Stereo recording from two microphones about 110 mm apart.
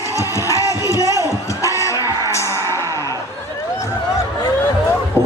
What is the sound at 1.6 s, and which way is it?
Music, 30° left (ahead or behind).